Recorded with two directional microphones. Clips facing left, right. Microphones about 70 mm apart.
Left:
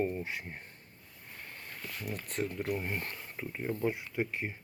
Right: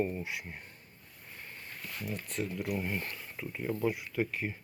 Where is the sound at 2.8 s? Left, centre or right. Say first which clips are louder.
Right 1 dB; left.